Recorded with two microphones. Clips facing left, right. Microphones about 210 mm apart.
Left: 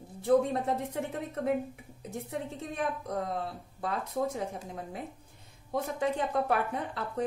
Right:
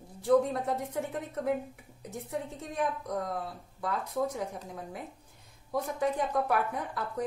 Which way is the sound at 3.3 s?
25° left (ahead or behind).